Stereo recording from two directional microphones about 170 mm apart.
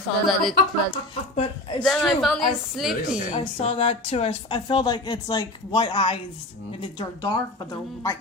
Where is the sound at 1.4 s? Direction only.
30° left (ahead or behind).